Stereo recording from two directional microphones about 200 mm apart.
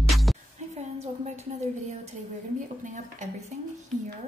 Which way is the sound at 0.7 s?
30° right (ahead or behind).